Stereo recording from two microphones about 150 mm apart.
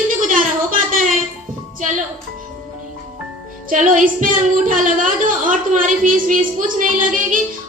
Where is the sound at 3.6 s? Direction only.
60° right (ahead or behind).